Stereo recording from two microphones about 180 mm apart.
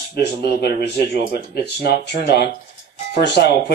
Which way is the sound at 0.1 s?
65° left (ahead or behind).